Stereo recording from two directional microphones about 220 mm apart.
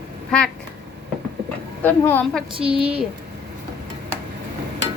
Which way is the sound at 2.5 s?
25° right (ahead or behind).